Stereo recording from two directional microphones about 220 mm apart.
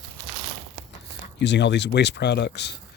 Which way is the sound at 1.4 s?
50° left (ahead or behind).